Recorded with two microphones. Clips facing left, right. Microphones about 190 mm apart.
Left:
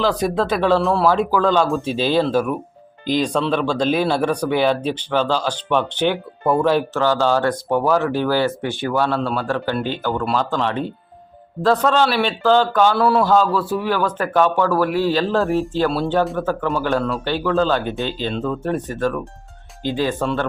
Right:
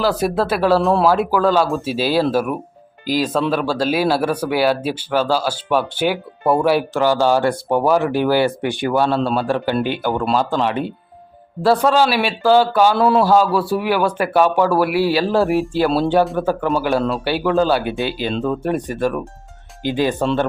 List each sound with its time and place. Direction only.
0.0 s speech: 10° right (ahead or behind)
13.0 s a man's voice: 20° right (ahead or behind)
13.2 s speech: 10° right (ahead or behind)